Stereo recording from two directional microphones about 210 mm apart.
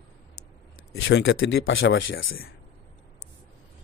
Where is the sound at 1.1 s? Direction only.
55° left (ahead or behind).